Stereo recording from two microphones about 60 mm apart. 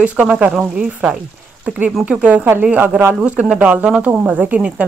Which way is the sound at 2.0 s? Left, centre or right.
Right.